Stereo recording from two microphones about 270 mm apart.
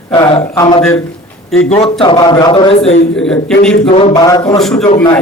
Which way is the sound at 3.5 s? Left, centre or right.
Left.